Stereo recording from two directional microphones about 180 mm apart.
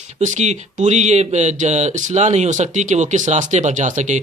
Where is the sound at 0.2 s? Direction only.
40° right (ahead or behind).